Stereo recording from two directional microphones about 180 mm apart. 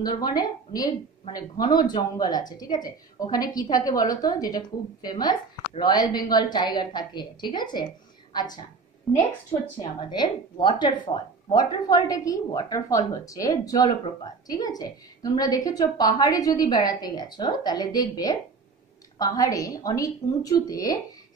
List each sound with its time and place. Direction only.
0.0 s a woman's voice: 25° left (ahead or behind)
9.1 s a woman's voice: 5° left (ahead or behind)
9.8 s a woman's voice: 25° left (ahead or behind)